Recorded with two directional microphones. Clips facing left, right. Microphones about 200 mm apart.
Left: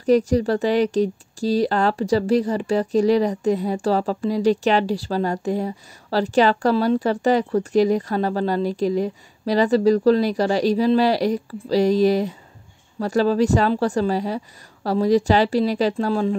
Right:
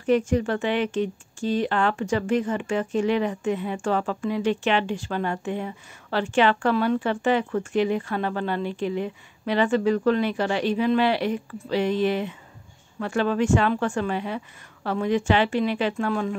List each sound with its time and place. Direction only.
0.0 s speech: 35° left (ahead or behind)